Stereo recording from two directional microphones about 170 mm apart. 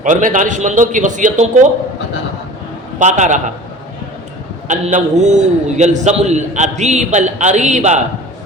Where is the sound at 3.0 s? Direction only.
45° right (ahead or behind).